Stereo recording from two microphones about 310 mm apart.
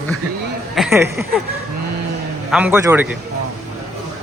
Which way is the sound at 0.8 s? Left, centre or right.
Centre.